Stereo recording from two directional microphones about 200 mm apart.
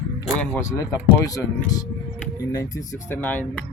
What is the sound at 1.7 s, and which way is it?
Music, 20° left (ahead or behind).